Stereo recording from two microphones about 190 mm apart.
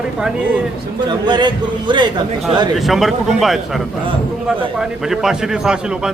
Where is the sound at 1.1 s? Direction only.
25° right (ahead or behind).